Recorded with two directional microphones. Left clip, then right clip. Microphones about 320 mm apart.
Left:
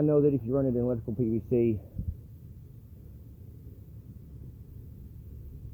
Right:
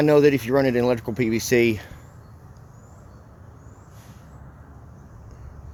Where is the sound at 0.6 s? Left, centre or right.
Right.